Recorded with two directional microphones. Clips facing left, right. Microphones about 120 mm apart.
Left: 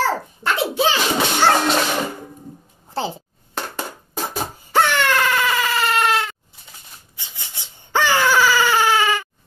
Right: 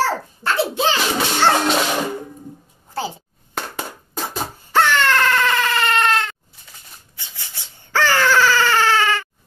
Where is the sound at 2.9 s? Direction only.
25° left (ahead or behind).